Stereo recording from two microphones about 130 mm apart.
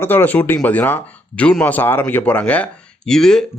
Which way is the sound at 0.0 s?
15° left (ahead or behind).